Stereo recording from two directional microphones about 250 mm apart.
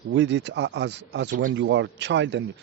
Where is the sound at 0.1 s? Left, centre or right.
Right.